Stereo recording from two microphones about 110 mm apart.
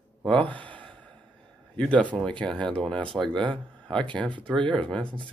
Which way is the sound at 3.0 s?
50° right (ahead or behind).